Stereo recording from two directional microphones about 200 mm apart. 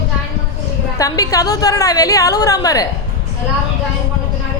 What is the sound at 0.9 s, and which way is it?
A woman's voice, 15° left (ahead or behind).